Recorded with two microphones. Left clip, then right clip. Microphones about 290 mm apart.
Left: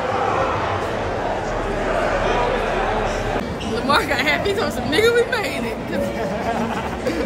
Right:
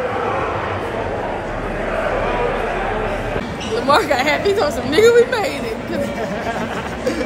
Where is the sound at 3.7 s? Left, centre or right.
Centre.